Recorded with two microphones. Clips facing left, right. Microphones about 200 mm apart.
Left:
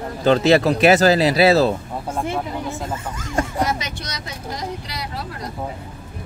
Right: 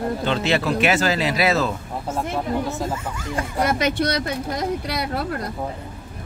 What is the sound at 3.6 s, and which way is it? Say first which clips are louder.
Speech: right 5 dB; 55° right (ahead or behind).